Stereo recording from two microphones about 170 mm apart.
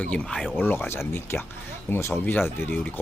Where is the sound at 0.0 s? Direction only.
5° left (ahead or behind).